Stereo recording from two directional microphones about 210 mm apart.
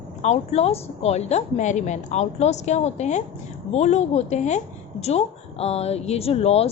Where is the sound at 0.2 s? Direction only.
30° left (ahead or behind).